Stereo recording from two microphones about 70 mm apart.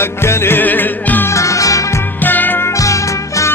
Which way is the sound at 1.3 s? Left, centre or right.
Left.